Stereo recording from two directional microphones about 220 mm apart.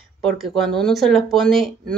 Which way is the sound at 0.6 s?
Centre (ahead or behind).